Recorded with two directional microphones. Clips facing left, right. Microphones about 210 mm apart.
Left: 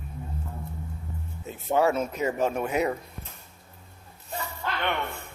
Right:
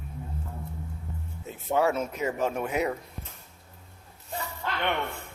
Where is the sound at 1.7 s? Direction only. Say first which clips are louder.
Left 2 dB; 35° left (ahead or behind).